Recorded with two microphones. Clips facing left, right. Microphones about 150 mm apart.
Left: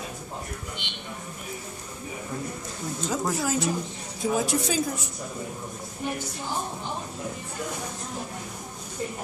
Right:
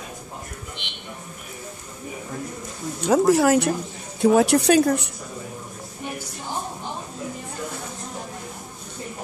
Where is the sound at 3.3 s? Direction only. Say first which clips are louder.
Right 8 dB; 65° right (ahead or behind).